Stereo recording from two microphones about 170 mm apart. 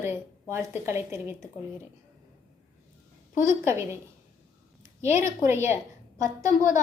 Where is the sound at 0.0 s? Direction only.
15° right (ahead or behind).